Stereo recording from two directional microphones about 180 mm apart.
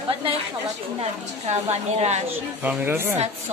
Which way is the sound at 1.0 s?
35° right (ahead or behind).